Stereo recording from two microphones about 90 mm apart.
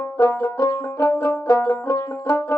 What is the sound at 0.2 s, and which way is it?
Banjo, 30° left (ahead or behind).